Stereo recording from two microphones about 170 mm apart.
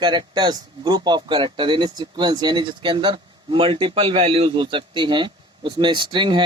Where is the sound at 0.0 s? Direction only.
25° right (ahead or behind).